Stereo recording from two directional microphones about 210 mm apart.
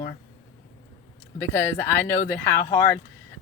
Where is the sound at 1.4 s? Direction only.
10° left (ahead or behind).